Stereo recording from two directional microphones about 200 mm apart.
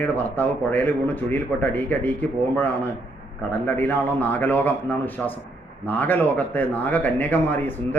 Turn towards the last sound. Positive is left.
turn(degrees=10)  # may be behind; listen again after turning